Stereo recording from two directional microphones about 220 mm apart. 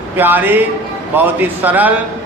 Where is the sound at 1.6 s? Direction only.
10° right (ahead or behind).